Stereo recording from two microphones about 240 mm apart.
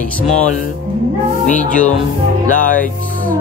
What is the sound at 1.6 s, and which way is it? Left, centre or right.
Speech, left.